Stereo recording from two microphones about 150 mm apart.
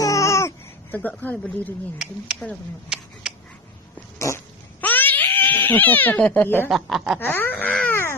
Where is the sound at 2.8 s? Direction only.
5° right (ahead or behind).